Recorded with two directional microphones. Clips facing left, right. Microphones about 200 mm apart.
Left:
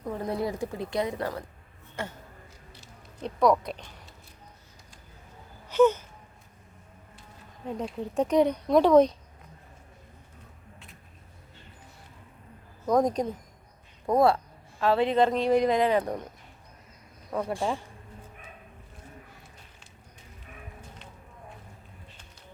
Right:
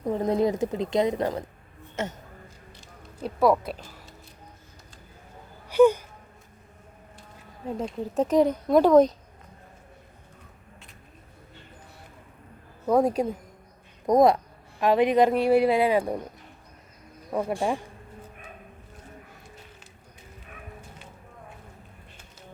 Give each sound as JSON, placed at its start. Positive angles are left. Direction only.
{"t": 0.0, "sound": "a woman's voice", "side_deg": -20}
{"t": 3.2, "sound": "speech", "side_deg": -5}
{"t": 5.6, "sound": "wail", "side_deg": -10}
{"t": 7.8, "sound": "speech", "side_deg": 0}
{"t": 12.8, "sound": "a woman's voice", "side_deg": -10}
{"t": 17.3, "sound": "a woman's voice", "side_deg": -10}